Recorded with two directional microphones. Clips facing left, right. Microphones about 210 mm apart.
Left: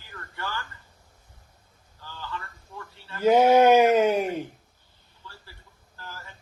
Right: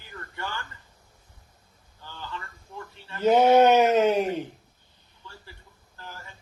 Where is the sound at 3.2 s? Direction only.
10° left (ahead or behind).